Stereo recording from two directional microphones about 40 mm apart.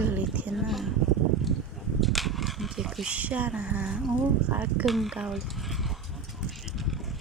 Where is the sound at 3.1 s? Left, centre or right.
Right.